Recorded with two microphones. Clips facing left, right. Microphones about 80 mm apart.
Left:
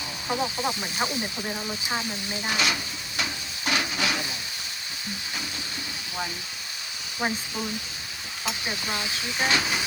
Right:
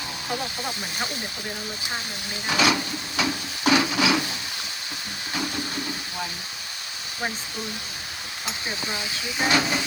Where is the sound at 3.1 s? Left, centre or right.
Right.